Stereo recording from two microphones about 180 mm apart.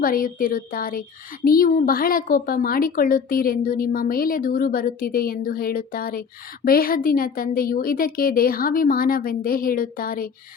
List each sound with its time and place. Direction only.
0.0 s a woman's voice: 50° left (ahead or behind)